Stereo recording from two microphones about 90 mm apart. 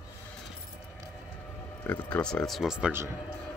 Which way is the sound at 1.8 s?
20° left (ahead or behind).